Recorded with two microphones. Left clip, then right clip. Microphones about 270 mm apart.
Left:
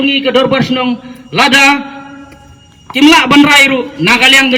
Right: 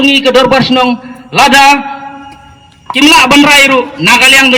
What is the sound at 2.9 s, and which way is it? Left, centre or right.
A man's voice, centre.